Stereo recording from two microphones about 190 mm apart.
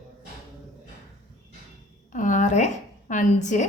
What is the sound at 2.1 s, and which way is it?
A woman's voice, 40° left (ahead or behind).